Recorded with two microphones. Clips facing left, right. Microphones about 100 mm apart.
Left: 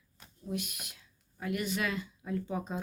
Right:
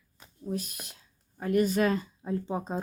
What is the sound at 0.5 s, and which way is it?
Speech, 35° right (ahead or behind).